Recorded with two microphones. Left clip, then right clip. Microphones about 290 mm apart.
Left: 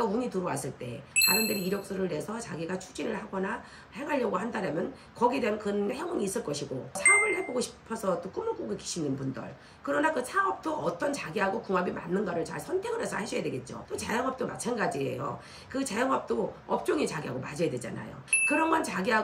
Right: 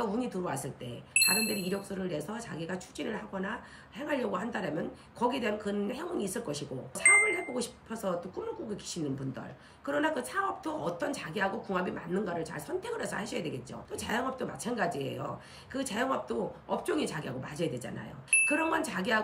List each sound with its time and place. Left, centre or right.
0.0 s speech: centre